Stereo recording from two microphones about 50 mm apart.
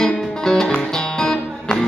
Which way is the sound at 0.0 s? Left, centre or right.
Centre.